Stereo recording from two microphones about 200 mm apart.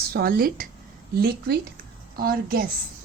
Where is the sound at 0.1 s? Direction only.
50° right (ahead or behind).